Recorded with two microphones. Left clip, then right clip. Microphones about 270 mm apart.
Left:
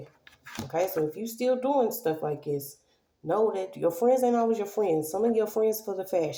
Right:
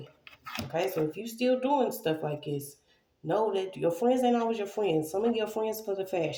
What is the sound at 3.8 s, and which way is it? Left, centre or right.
Speech, left.